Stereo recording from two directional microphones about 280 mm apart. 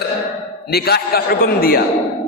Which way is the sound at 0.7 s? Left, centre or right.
Left.